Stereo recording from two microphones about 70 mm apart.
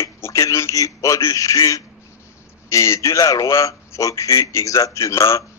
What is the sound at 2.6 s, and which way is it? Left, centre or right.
A man's voice, left.